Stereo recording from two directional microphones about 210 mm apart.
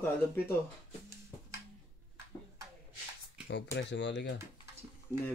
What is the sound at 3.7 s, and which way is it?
Speech, 55° left (ahead or behind).